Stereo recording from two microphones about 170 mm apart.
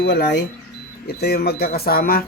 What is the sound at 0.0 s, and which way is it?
Speech, 90° left.